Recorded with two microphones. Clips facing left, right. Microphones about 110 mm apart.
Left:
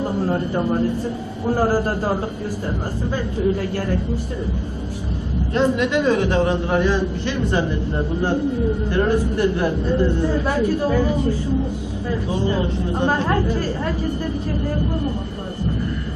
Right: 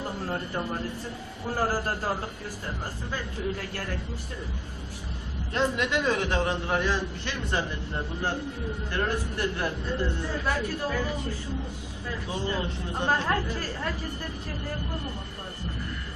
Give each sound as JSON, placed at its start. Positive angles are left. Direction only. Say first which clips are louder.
{"t": 0.0, "sound": "a man's voice", "louder": "left 11 dB", "side_deg": 25}
{"t": 3.6, "sound": "speech", "louder": "left 11 dB", "side_deg": 15}
{"t": 5.5, "sound": "a man's voice", "louder": "left 8 dB", "side_deg": 20}
{"t": 12.3, "sound": "a man's voice", "louder": "left 8 dB", "side_deg": 20}